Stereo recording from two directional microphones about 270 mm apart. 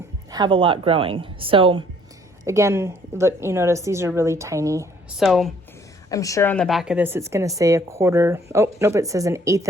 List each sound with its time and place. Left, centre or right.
0.3 s a woman's voice: centre
5.2 s speech: centre
6.1 s a woman's voice: centre